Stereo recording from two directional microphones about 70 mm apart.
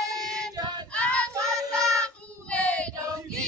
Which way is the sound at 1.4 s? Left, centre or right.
Centre.